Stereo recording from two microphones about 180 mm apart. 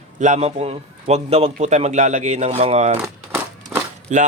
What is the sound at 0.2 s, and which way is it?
Speech, 40° right (ahead or behind).